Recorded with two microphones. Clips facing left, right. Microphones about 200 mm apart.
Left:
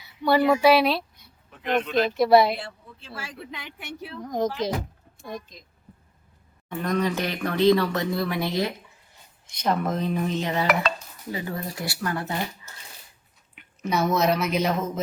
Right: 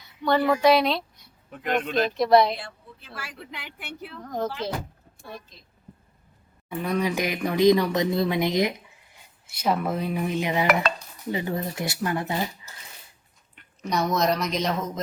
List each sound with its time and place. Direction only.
0.0 s speech: 10° left (ahead or behind)
1.6 s speech: 50° right (ahead or behind)
2.0 s speech: 5° left (ahead or behind)
4.2 s speech: 10° left (ahead or behind)
6.7 s speech: 10° right (ahead or behind)
9.5 s speech: 5° right (ahead or behind)
11.3 s speech: 25° right (ahead or behind)
13.6 s speech: 5° left (ahead or behind)